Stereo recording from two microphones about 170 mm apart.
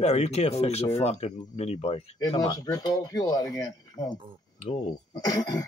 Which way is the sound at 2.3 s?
25° left (ahead or behind).